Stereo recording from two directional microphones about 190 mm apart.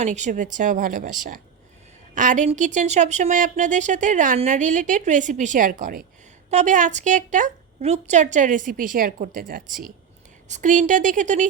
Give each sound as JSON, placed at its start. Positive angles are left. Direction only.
{"t": 0.0, "sound": "speech", "side_deg": -40}
{"t": 2.1, "sound": "speech", "side_deg": -40}